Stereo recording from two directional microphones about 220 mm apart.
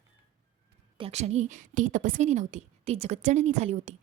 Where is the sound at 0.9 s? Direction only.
25° right (ahead or behind).